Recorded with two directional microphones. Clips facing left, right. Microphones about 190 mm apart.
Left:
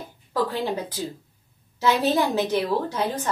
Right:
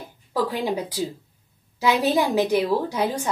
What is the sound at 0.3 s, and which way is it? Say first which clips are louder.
A woman's voice: right 1 dB; 15° right (ahead or behind).